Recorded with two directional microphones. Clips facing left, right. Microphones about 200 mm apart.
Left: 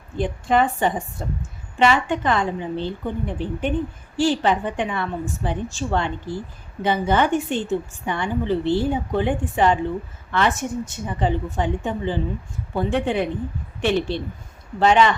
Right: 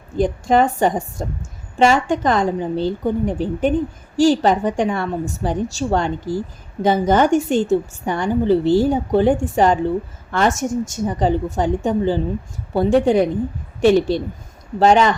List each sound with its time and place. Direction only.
0.2 s a woman's voice: 40° right (ahead or behind)